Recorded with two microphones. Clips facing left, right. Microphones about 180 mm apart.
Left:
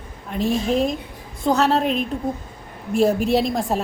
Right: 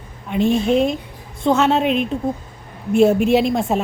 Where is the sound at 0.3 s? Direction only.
Centre (ahead or behind).